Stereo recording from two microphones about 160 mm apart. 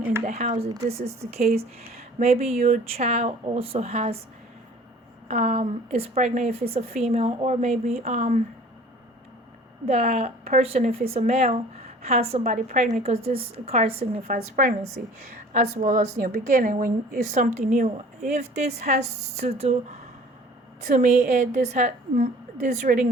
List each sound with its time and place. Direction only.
0.3 s a woman's voice: 50° right (ahead or behind)
5.3 s a woman's voice: 45° right (ahead or behind)
9.8 s a woman's voice: 45° right (ahead or behind)
20.8 s a woman's voice: 50° right (ahead or behind)